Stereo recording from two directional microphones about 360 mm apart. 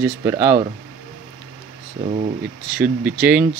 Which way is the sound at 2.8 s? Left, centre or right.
Centre.